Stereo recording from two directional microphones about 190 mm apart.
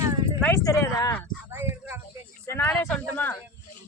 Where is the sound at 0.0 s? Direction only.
20° right (ahead or behind).